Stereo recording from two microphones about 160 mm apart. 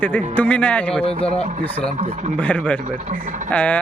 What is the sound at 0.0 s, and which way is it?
Speech, 10° left (ahead or behind).